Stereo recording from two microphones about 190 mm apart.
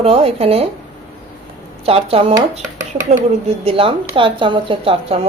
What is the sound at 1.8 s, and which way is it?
Speech, 30° right (ahead or behind).